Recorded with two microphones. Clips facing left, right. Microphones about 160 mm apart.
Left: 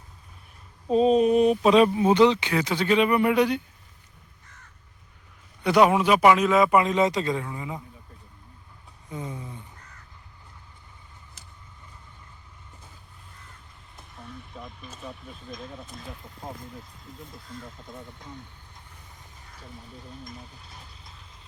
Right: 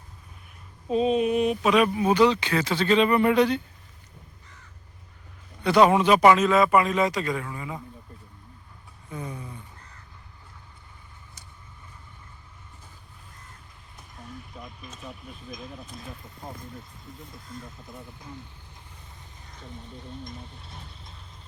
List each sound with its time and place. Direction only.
0.9 s speech: 35° left (ahead or behind); by 3.6 s 10° left (ahead or behind)
5.6 s a man's voice: 10° left (ahead or behind)
9.0 s speech: 20° left (ahead or behind)
14.5 s speech: centre (ahead or behind)
19.5 s speech: 5° left (ahead or behind)
20.7 s vehicle: centre (ahead or behind)